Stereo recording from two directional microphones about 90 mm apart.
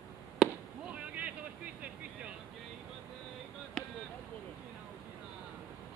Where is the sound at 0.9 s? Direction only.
15° right (ahead or behind).